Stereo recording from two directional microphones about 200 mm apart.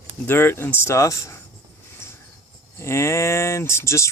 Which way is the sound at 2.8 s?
15° left (ahead or behind).